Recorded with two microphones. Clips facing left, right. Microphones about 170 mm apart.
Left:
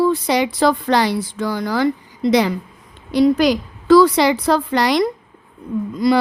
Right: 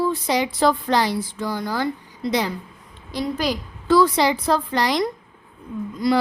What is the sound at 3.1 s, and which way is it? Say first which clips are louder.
A woman's voice: left 10 dB; 75° left (ahead or behind).